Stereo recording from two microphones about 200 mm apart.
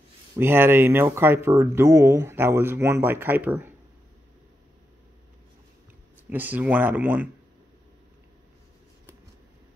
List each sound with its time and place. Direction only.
0.4 s speech: 10° right (ahead or behind)
6.3 s speech: 10° right (ahead or behind)